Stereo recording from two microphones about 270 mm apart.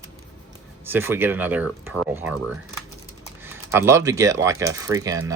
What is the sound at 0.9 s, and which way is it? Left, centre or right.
Speech, centre.